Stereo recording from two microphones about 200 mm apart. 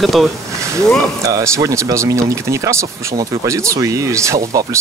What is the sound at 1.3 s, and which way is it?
Speech, 15° right (ahead or behind).